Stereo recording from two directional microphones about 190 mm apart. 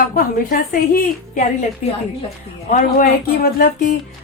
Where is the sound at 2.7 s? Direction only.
45° left (ahead or behind).